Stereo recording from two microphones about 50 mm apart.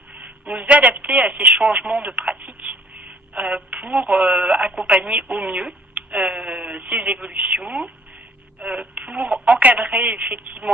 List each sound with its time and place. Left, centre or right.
0.1 s speech: right
2.3 s telephone: right
4.1 s speech: centre
4.6 s speech: right